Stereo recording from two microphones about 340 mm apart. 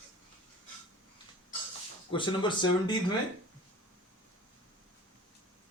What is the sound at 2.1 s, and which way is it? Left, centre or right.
Speech, centre.